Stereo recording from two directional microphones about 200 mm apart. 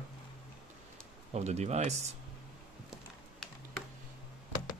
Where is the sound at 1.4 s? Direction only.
35° right (ahead or behind).